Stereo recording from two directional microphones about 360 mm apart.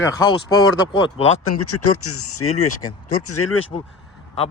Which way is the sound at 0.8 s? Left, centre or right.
Centre.